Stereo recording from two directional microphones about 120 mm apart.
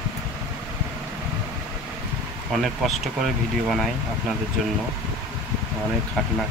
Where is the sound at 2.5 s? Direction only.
Centre (ahead or behind).